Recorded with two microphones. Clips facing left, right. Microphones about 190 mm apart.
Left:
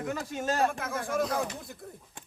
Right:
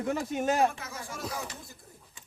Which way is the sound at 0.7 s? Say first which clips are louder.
Left 7 dB; 55° left (ahead or behind).